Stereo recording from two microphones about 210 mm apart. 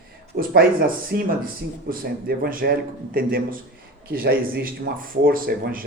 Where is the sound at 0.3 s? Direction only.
45° right (ahead or behind).